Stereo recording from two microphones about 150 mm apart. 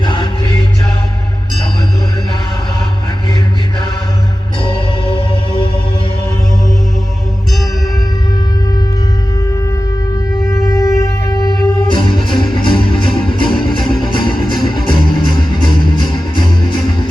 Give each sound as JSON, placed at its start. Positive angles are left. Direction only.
{"t": 0.0, "sound": "music", "side_deg": 30}
{"t": 4.6, "sound": "music", "side_deg": 35}
{"t": 10.5, "sound": "music", "side_deg": 20}